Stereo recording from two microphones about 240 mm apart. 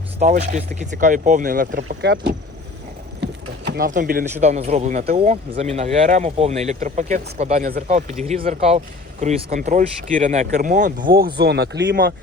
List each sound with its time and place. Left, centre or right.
0.2 s speech: right
3.7 s speech: right